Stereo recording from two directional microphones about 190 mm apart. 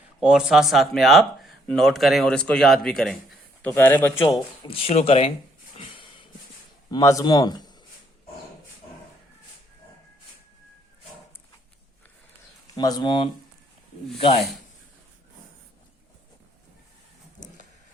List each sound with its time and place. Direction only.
0.2 s a man's voice: 5° right (ahead or behind)
4.2 s speech: 25° left (ahead or behind)
5.7 s a sound: 30° left (ahead or behind)
6.9 s speech: 15° left (ahead or behind)
12.7 s speech: 20° left (ahead or behind)